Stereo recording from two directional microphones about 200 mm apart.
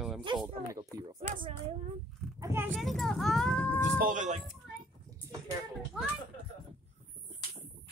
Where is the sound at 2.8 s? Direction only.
Centre (ahead or behind).